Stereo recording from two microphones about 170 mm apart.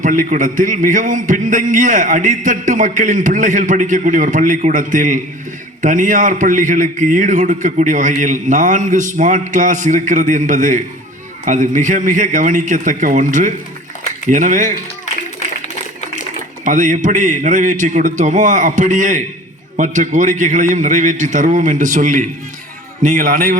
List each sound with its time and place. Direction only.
0.0 s a man's voice: 50° right (ahead or behind)
16.6 s a man's voice: 50° right (ahead or behind)